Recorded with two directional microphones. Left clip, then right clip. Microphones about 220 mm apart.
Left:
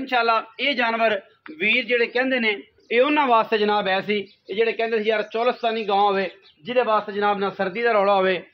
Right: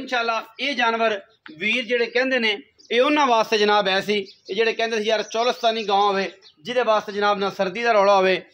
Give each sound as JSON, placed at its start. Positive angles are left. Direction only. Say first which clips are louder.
{"t": 0.0, "sound": "speech", "louder": "left 3 dB", "side_deg": 40}
{"t": 1.6, "sound": "speech", "louder": "left 2 dB", "side_deg": 20}
{"t": 2.2, "sound": "a man's voice", "louder": "right 1 dB", "side_deg": -10}
{"t": 2.9, "sound": "a man's voice", "louder": "even", "side_deg": -25}